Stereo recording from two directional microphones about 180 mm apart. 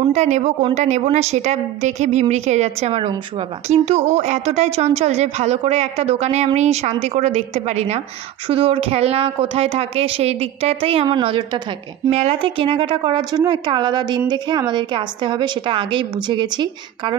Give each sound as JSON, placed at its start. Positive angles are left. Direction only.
{"t": 0.0, "sound": "a woman's voice", "side_deg": -40}